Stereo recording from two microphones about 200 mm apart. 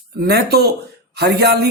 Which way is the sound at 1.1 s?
55° right (ahead or behind).